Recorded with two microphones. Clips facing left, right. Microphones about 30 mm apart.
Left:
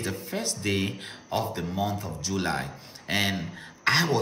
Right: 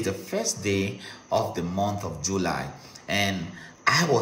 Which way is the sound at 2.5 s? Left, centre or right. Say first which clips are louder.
Even; centre.